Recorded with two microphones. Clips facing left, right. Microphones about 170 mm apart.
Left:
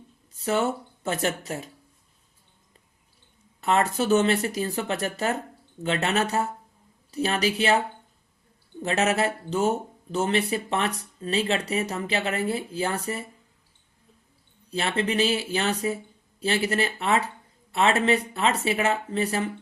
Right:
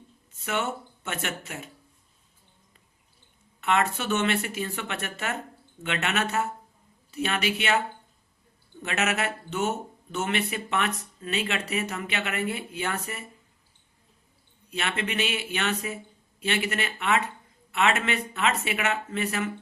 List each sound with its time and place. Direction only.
0.3 s speech: 35° left (ahead or behind)
3.6 s speech: 35° left (ahead or behind)
8.8 s speech: 35° left (ahead or behind)
14.7 s speech: 30° left (ahead or behind)